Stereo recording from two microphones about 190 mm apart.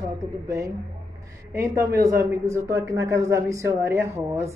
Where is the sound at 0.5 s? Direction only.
15° right (ahead or behind).